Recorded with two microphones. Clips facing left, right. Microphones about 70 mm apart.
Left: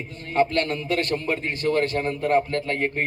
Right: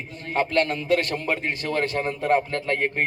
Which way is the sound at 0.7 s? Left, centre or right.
Left.